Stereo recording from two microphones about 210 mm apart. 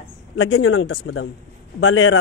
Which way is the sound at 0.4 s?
65° left (ahead or behind).